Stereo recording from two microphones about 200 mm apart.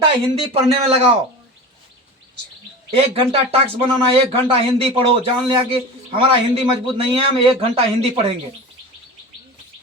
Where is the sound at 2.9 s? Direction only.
30° right (ahead or behind).